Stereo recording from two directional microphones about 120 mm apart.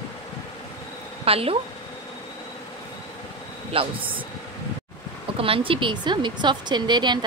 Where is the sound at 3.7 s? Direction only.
45° right (ahead or behind).